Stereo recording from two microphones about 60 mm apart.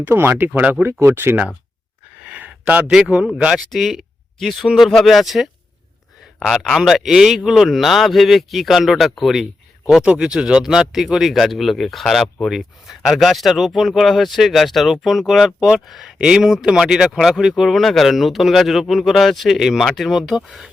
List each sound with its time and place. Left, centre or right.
0.0 s speech: right
1.0 s speech: right
2.2 s a sound: centre
3.3 s speech: centre
3.7 s speech: centre